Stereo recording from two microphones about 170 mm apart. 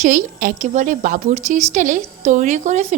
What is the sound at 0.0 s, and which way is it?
A woman's voice, 50° right (ahead or behind).